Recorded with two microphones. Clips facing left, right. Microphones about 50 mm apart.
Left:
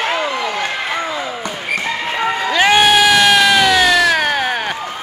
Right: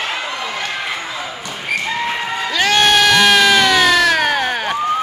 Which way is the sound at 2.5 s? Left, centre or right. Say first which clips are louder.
Left 2 dB; centre.